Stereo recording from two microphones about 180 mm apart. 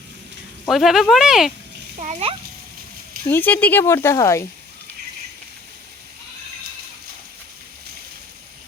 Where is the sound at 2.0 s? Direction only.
40° right (ahead or behind).